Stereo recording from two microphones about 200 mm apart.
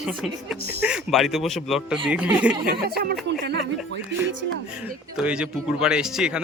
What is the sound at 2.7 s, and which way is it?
Speech, 50° right (ahead or behind).